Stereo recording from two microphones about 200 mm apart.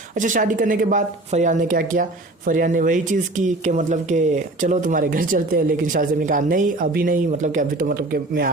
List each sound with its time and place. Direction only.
0.2 s speech: 40° right (ahead or behind)